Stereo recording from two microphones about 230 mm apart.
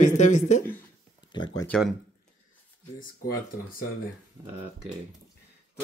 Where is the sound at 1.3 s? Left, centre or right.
Centre.